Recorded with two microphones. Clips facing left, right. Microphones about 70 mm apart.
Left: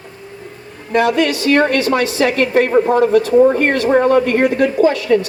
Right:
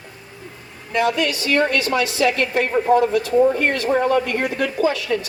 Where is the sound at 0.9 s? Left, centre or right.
Left.